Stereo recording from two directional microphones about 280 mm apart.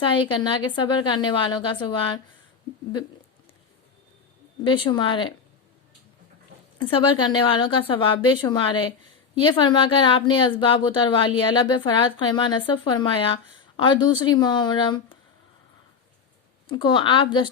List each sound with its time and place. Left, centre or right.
0.0 s speech: centre
4.6 s speech: centre
6.7 s speech: centre
16.6 s speech: centre